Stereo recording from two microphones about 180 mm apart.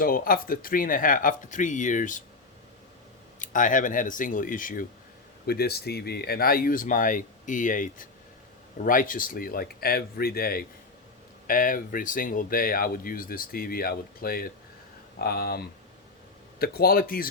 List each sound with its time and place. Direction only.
0.0 s speech: 55° left (ahead or behind)
3.3 s speech: 45° left (ahead or behind)
5.5 s speech: 60° left (ahead or behind)